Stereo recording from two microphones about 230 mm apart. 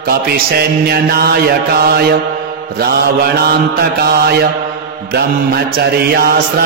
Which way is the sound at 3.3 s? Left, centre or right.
Right.